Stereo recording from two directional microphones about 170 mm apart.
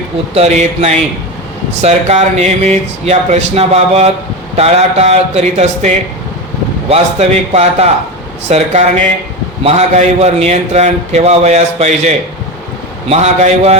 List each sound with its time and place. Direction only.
0.3 s a man's voice: 40° right (ahead or behind)